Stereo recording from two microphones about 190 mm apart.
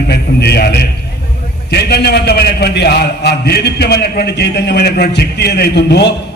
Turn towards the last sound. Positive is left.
turn(degrees=60)  # may be behind; listen again after turning